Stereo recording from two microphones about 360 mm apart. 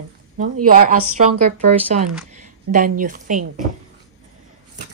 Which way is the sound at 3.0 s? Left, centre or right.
Right.